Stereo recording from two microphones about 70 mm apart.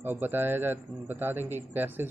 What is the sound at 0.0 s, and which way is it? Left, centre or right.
A man's voice, right.